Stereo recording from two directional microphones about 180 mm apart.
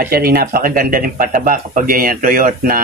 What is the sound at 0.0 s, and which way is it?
Speech, 55° right (ahead or behind).